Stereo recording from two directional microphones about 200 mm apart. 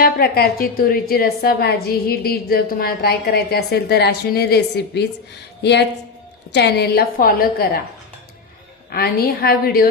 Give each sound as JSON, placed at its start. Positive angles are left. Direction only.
{"t": 0.0, "sound": "a woman's voice", "side_deg": 50}
{"t": 6.5, "sound": "a woman's voice", "side_deg": 55}
{"t": 8.9, "sound": "a woman's voice", "side_deg": 50}